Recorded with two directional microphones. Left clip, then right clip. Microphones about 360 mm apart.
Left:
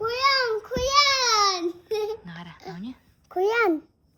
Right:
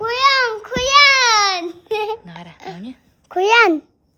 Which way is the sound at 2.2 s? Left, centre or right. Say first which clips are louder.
Right 5 dB; centre.